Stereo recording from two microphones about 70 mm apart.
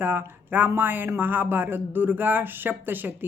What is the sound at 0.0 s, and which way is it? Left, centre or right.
Speech, right.